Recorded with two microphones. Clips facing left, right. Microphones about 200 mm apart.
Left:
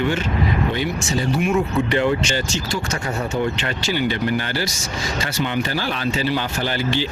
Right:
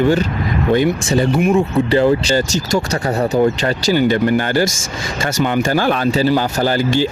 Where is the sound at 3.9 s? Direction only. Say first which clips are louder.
Right 7 dB; 45° right (ahead or behind).